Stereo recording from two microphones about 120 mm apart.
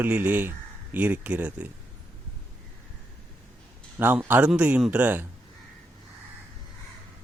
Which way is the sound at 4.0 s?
15° right (ahead or behind).